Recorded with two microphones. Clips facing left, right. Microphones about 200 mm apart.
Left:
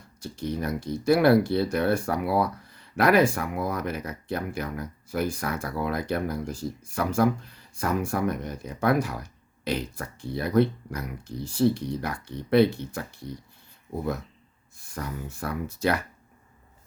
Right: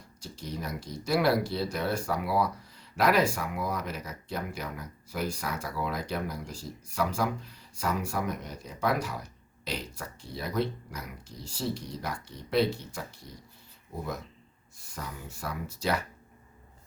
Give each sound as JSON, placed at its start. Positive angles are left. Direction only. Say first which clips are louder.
{"t": 0.2, "sound": "speech", "louder": "left 7 dB", "side_deg": 55}
{"t": 14.9, "sound": "speech", "louder": "left 6 dB", "side_deg": 55}